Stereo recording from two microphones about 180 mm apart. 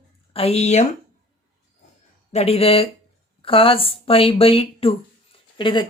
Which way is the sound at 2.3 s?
35° left (ahead or behind).